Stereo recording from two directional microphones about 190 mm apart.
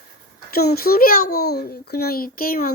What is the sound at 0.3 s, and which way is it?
A child's voice, 55° left (ahead or behind).